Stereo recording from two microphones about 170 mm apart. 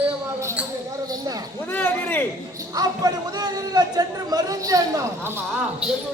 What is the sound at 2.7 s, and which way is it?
A man's voice, 20° right (ahead or behind).